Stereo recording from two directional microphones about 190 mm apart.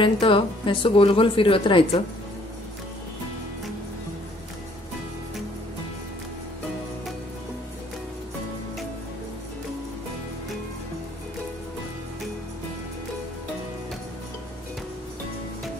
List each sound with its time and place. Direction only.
0.0 s a woman's voice: 25° left (ahead or behind)